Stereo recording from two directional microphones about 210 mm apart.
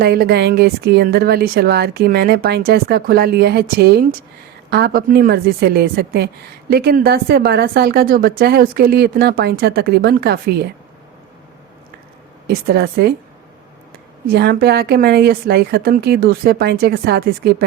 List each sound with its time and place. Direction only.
0.0 s speech: 50° right (ahead or behind)
12.5 s speech: 50° right (ahead or behind)
14.3 s speech: 50° right (ahead or behind)